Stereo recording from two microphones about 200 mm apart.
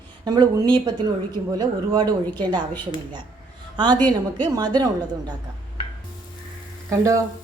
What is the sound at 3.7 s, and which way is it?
A woman's voice, 20° right (ahead or behind).